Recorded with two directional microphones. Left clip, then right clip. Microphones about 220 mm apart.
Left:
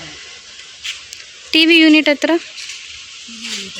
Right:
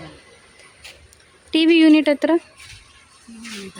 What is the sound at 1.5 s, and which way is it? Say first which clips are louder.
Speech: left 4 dB; 5° right (ahead or behind).